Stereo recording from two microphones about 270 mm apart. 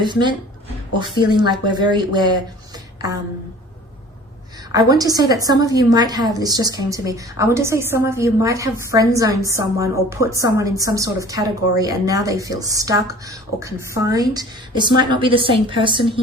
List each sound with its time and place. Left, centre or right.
0.0 s a woman's voice: centre
4.7 s a woman's voice: centre